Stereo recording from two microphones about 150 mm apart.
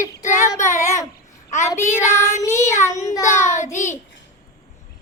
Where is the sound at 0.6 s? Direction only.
55° left (ahead or behind).